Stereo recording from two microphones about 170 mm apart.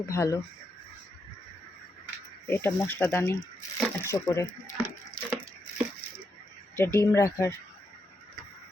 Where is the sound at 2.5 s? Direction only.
15° left (ahead or behind).